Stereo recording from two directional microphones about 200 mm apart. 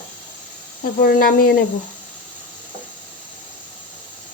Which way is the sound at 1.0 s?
45° left (ahead or behind).